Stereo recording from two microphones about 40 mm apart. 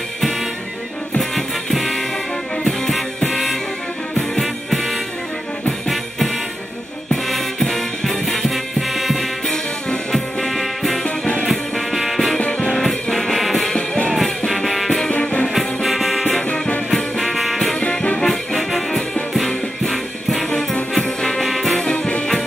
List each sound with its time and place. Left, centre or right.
1.3 s music: centre
11.1 s music: left
11.4 s music: centre
12.4 s music: left
12.7 s music: centre
13.7 s music: left
14.1 s music: centre
15.0 s music: left
15.4 s music: centre